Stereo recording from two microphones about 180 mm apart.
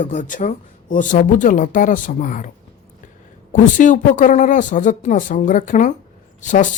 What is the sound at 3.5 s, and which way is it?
Speech, 45° left (ahead or behind).